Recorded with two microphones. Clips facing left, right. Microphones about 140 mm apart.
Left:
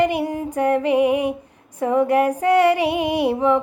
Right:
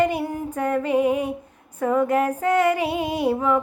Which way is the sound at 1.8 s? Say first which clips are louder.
Left 3 dB; 20° left (ahead or behind).